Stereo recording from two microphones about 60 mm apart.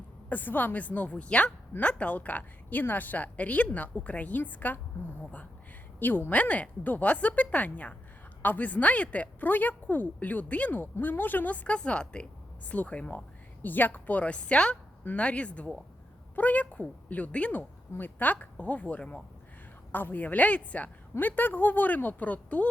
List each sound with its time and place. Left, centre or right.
0.3 s a woman's voice: left
6.0 s a woman's voice: left
19.9 s a woman's voice: left